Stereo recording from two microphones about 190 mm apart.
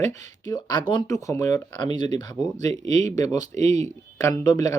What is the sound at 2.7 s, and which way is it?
Speech, 35° right (ahead or behind).